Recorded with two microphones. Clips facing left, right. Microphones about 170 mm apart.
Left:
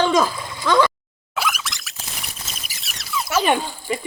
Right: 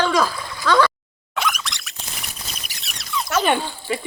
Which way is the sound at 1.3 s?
5° left (ahead or behind).